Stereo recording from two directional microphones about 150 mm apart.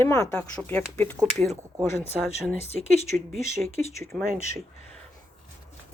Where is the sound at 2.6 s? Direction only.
45° left (ahead or behind).